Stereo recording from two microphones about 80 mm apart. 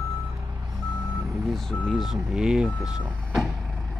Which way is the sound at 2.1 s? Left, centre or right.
Centre.